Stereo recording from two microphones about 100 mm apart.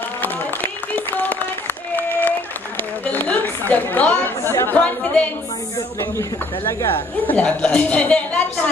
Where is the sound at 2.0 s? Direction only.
20° left (ahead or behind).